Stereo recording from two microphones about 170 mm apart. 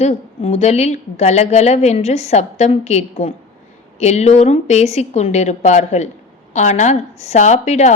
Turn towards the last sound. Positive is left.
turn(degrees=40)  # may be behind; listen again after turning